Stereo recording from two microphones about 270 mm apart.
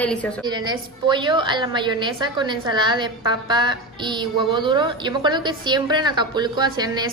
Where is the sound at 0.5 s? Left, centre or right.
Centre.